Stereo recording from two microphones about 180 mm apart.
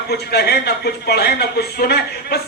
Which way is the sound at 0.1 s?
65° left (ahead or behind).